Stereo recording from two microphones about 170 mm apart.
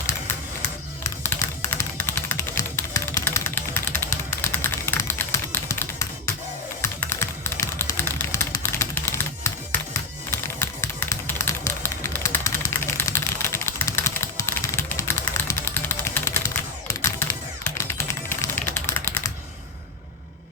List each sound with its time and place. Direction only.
1.0 s typing: 15° left (ahead or behind)
10.3 s a sound: 15° left (ahead or behind)
16.9 s typing: 15° left (ahead or behind)